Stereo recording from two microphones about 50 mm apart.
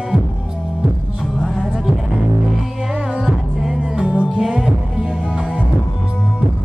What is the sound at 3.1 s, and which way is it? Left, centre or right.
Music, centre.